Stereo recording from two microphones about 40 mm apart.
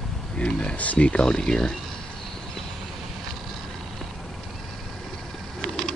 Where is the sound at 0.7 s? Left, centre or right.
Left.